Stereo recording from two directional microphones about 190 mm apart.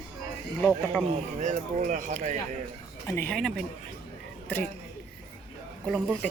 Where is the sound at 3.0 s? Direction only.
10° left (ahead or behind).